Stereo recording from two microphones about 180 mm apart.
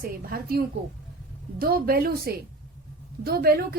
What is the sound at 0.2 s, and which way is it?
A woman's voice, 55° right (ahead or behind).